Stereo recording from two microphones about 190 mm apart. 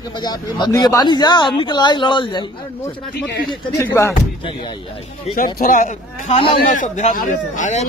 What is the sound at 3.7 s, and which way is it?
Speech, 15° left (ahead or behind).